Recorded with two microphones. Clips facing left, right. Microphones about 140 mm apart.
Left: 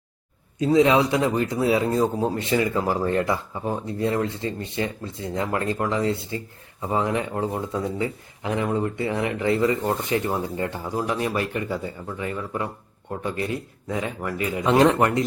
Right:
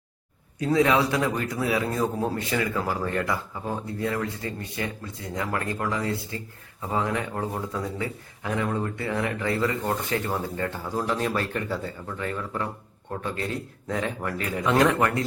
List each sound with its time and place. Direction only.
0.6 s speech: 20° left (ahead or behind)
14.6 s speech: 25° left (ahead or behind)